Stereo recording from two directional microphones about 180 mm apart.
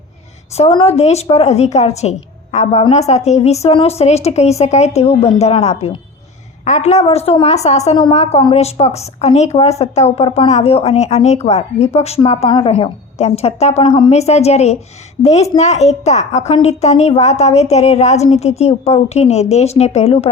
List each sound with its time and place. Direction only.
0.5 s a woman's voice: 35° left (ahead or behind)